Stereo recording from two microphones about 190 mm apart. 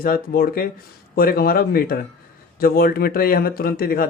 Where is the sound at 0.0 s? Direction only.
50° left (ahead or behind).